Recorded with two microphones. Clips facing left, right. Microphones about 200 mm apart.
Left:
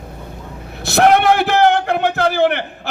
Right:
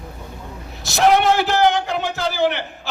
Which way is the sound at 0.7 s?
60° left (ahead or behind).